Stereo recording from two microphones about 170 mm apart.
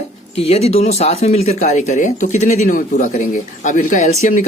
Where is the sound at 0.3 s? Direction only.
35° left (ahead or behind).